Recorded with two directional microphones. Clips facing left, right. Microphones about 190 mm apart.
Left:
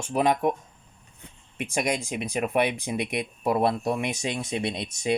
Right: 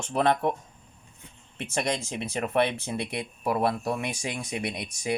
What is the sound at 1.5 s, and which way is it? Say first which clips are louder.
Speech: left 2 dB; 15° left (ahead or behind).